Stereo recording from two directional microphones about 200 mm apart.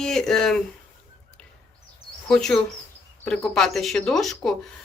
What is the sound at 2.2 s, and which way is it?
Speech, 5° left (ahead or behind).